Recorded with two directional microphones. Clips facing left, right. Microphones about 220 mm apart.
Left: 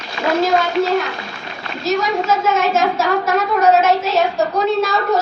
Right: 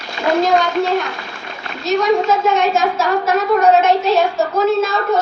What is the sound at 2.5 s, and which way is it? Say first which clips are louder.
A woman's voice: right 1 dB; centre (ahead or behind).